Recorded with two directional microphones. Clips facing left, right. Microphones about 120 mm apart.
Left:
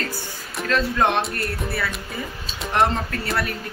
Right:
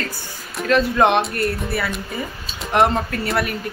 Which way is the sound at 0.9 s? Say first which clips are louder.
Right 4 dB; 75° right (ahead or behind).